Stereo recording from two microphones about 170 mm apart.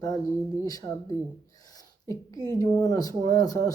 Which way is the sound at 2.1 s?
20° left (ahead or behind).